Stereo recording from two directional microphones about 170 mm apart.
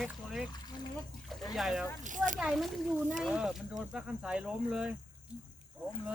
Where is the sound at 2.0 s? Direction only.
50° right (ahead or behind).